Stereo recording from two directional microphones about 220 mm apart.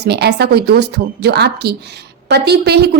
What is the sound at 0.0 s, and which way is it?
A woman's voice, 50° right (ahead or behind).